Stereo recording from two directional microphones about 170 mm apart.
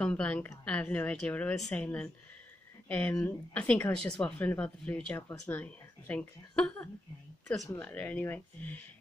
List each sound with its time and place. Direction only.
0.0 s speech: 5° left (ahead or behind)
5.3 s speech: 20° left (ahead or behind)
5.6 s speech: 10° left (ahead or behind)